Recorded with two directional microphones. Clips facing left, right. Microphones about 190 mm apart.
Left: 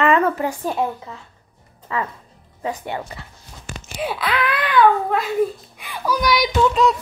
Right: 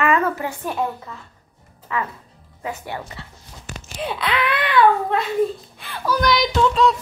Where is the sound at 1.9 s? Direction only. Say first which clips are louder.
Left 1 dB; 30° left (ahead or behind).